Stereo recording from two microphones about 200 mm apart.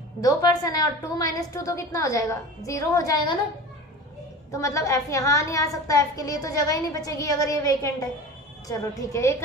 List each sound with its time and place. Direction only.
0.2 s a woman's voice: 15° left (ahead or behind)
4.5 s a woman's voice: 15° left (ahead or behind)